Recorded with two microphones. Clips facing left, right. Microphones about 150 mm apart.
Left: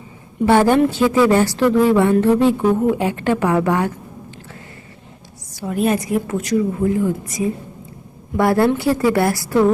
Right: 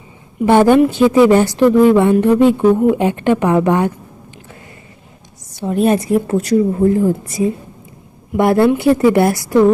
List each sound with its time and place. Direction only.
0.4 s a woman's voice: 20° right (ahead or behind)
5.5 s a woman's voice: 25° right (ahead or behind)
8.4 s a woman's voice: 20° right (ahead or behind)